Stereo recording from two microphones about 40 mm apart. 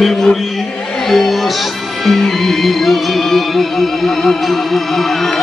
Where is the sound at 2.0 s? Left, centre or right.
Centre.